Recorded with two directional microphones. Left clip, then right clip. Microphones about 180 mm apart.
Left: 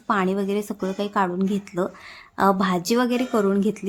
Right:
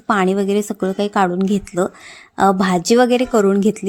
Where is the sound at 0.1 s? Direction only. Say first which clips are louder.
Right 6 dB; 30° right (ahead or behind).